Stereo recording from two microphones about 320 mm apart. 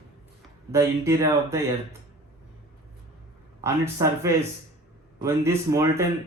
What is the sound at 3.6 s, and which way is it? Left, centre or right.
Speech, centre.